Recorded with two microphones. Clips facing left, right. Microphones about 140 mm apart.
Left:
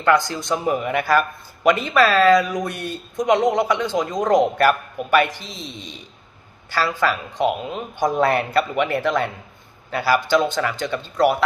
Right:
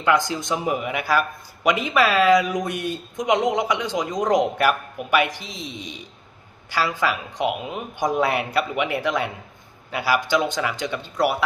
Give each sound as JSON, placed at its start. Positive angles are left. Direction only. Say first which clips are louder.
{"t": 0.0, "sound": "speech", "louder": "left 2 dB", "side_deg": -15}